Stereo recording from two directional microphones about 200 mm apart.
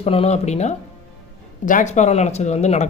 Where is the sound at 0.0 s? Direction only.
30° left (ahead or behind).